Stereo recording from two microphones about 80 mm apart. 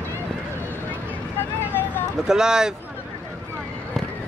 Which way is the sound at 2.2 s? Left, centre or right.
Centre.